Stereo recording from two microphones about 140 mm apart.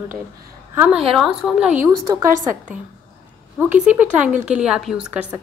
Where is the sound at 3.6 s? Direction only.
10° right (ahead or behind).